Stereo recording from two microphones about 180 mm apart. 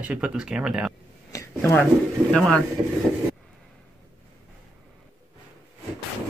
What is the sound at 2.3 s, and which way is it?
Speech, centre (ahead or behind).